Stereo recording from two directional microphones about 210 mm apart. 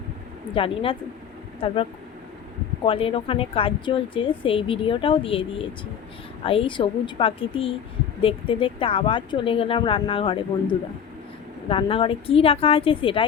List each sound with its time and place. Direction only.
0.5 s speech: 25° left (ahead or behind)